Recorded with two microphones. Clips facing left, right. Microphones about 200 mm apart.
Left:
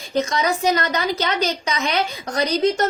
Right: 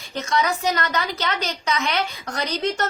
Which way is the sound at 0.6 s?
20° left (ahead or behind).